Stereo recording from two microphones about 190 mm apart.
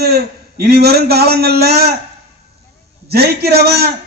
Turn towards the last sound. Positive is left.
turn(degrees=-55)  # may be behind; listen again after turning